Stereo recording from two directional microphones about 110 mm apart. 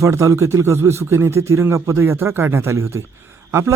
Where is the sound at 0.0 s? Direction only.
30° right (ahead or behind).